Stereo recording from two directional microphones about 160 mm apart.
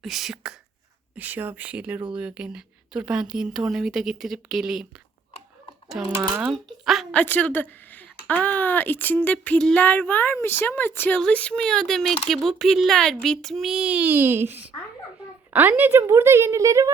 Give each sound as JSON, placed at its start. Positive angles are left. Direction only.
{"t": 0.0, "sound": "a woman's voice", "side_deg": 0}
{"t": 6.0, "sound": "a woman's voice", "side_deg": -5}